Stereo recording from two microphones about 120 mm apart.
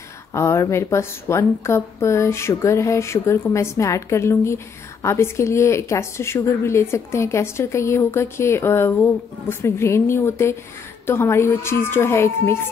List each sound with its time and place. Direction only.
0.3 s a woman's voice: 25° left (ahead or behind)